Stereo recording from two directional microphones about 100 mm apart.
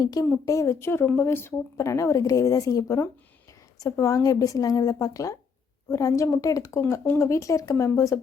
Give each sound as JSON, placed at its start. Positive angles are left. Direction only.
{"t": 0.0, "sound": "speech", "side_deg": 40}
{"t": 1.0, "sound": "speech", "side_deg": 15}
{"t": 1.3, "sound": "speech", "side_deg": 25}